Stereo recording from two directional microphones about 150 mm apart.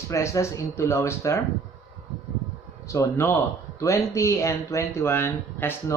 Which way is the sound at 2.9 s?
20° left (ahead or behind).